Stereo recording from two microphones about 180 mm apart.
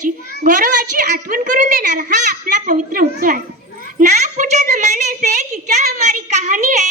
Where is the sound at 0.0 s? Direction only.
50° right (ahead or behind).